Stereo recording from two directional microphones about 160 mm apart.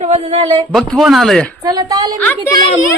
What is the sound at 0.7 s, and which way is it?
Speech, centre (ahead or behind).